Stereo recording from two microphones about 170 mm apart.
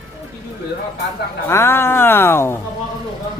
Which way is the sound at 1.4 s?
15° left (ahead or behind).